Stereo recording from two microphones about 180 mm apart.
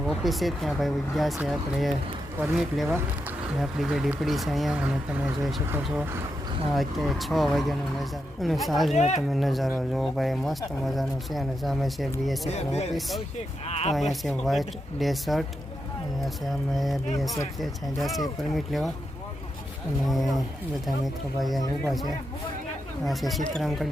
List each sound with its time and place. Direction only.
0.1 s speech: centre (ahead or behind)
6.7 s speech: centre (ahead or behind)
9.0 s speech: 40° left (ahead or behind)
9.3 s speech: centre (ahead or behind)
12.5 s speech: 35° left (ahead or behind)
12.9 s speech: centre (ahead or behind)
13.7 s speech: 35° left (ahead or behind)
13.9 s speech: centre (ahead or behind)
16.7 s speech: centre (ahead or behind)
20.1 s speech: centre (ahead or behind)
23.0 s speech: centre (ahead or behind)